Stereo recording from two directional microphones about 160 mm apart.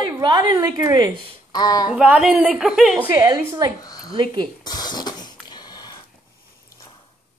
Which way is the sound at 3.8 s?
25° left (ahead or behind).